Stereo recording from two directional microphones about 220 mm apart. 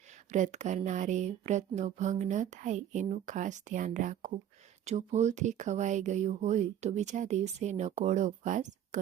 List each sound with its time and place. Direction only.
0.3 s speech: 35° right (ahead or behind)